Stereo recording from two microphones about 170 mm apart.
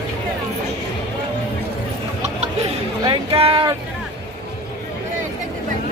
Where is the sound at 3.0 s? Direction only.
30° right (ahead or behind).